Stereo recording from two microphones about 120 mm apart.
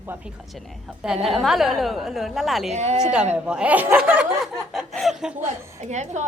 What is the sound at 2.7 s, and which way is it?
Speech, 70° right (ahead or behind).